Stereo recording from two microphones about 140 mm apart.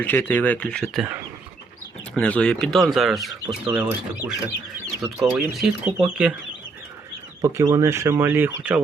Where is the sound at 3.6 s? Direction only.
15° right (ahead or behind).